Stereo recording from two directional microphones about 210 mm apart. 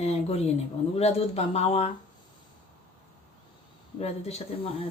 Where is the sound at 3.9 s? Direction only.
30° left (ahead or behind).